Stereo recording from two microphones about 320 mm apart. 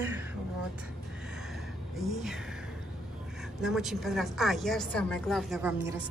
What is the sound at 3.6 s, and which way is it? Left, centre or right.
A woman's voice, centre.